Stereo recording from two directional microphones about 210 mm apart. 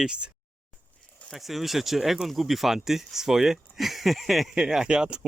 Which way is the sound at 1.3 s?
Centre (ahead or behind).